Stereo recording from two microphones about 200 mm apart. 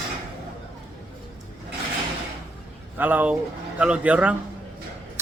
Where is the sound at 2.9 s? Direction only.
10° right (ahead or behind).